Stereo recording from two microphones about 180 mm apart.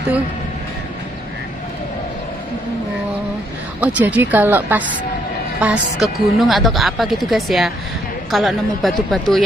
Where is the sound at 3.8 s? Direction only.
10° right (ahead or behind).